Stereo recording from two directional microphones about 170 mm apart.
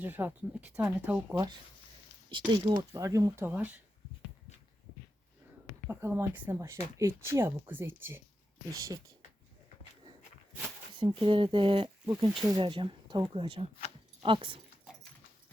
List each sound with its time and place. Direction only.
0.0 s speech: 10° right (ahead or behind)
2.5 s speech: 25° right (ahead or behind); by 3.8 s 10° right (ahead or behind)
5.9 s speech: 15° right (ahead or behind)
11.0 s speech: 30° right (ahead or behind)
12.6 s speech: 30° right (ahead or behind)
14.9 s dog: 5° right (ahead or behind)